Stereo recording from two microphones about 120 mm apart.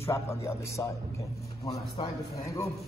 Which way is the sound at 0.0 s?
20° left (ahead or behind).